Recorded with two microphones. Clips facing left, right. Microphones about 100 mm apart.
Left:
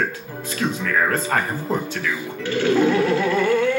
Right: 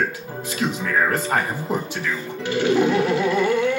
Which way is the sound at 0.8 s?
20° right (ahead or behind).